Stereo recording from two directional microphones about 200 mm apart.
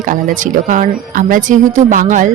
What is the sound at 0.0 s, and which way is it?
A woman's voice, 40° right (ahead or behind).